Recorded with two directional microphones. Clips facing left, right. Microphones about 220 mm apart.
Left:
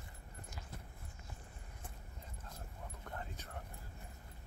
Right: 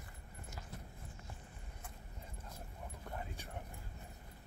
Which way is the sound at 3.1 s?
15° right (ahead or behind).